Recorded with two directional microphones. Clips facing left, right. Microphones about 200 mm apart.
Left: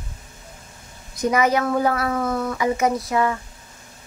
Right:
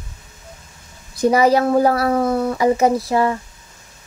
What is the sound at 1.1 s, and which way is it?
A woman's voice, 30° right (ahead or behind).